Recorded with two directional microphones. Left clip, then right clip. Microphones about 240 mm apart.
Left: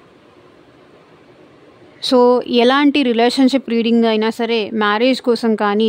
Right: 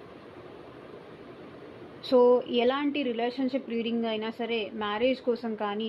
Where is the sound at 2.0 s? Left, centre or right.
Left.